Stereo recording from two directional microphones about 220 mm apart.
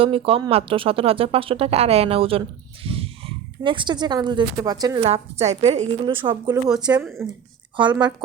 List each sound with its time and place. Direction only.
0.0 s speech: 25° right (ahead or behind)
5.0 s speech: 30° right (ahead or behind)
6.5 s speech: 5° right (ahead or behind)